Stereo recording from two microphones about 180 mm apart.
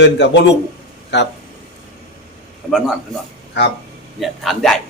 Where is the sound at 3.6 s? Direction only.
70° left (ahead or behind).